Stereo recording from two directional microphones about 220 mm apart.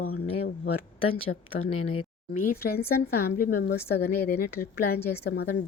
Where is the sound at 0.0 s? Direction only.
85° left.